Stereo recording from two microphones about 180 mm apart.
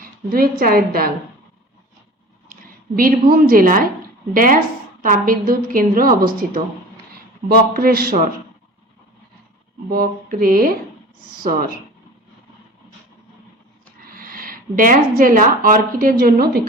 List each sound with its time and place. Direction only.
0.0 s a woman's voice: 55° right (ahead or behind)
2.5 s a woman's voice: 50° right (ahead or behind)
9.9 s a woman's voice: 55° right (ahead or behind)
14.2 s a woman's voice: 55° right (ahead or behind)